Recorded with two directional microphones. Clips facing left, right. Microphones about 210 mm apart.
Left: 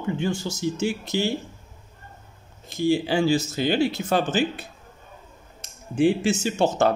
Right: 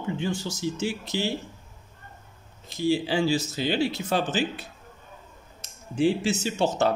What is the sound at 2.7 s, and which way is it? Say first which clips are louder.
Speech: left 3 dB; 50° left (ahead or behind).